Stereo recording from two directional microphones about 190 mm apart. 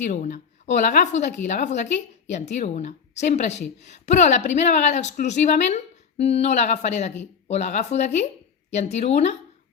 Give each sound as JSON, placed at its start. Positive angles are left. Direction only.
{"t": 0.0, "sound": "a woman's voice", "side_deg": 40}